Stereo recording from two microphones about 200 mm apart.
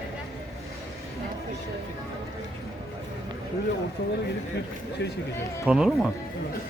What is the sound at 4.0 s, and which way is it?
Speech, 55° left (ahead or behind).